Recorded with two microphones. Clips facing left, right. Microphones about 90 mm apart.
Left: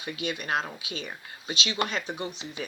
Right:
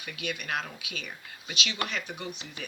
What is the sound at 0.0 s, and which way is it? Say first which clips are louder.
Speech: left 4 dB; 30° left (ahead or behind).